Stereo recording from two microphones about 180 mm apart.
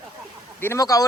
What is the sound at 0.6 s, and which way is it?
Speech, 15° left (ahead or behind).